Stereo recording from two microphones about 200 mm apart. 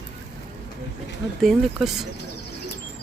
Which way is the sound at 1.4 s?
Centre (ahead or behind).